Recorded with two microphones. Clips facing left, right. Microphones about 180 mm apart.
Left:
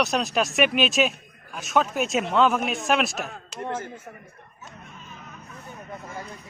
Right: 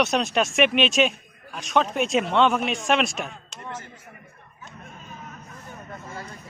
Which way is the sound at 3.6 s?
55° left (ahead or behind).